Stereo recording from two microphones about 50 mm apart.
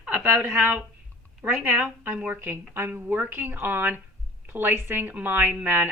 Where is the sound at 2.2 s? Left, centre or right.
Right.